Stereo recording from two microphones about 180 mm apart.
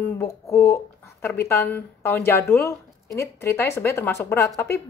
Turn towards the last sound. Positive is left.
turn(degrees=15)  # may be behind; listen again after turning